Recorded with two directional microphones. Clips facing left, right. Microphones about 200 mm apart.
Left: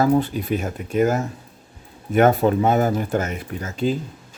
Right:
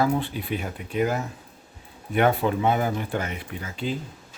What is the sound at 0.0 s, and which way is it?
Speech, 45° left (ahead or behind).